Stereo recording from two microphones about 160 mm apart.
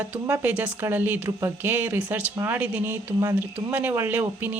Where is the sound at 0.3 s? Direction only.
10° right (ahead or behind).